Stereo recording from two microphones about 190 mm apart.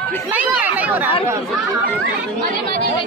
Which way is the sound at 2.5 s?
45° right (ahead or behind).